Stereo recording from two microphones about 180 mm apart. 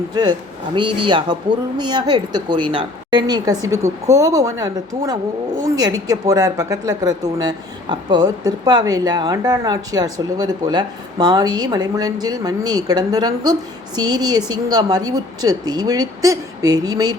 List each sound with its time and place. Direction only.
0.1 s a woman's voice: 25° right (ahead or behind)